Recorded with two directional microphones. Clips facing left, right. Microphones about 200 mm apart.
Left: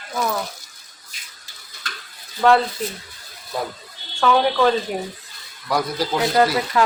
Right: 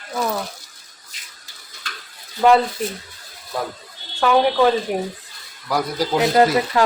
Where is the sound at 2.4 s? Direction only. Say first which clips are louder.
Right 1 dB; 15° right (ahead or behind).